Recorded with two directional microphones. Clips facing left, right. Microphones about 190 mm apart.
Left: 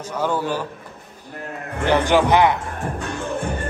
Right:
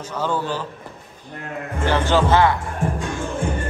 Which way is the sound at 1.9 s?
15° left (ahead or behind).